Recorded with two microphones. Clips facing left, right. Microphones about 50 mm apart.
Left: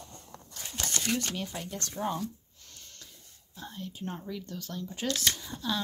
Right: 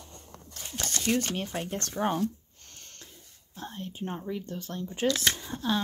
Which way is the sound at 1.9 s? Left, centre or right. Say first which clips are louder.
Right 5 dB; right.